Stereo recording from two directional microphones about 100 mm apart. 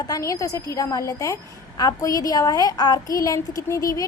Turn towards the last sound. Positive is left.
turn(degrees=35)  # may be behind; listen again after turning